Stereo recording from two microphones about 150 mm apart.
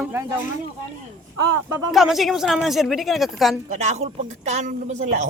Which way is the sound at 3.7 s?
50° right (ahead or behind).